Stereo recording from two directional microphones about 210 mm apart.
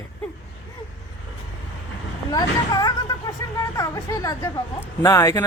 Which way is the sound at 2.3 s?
20° left (ahead or behind).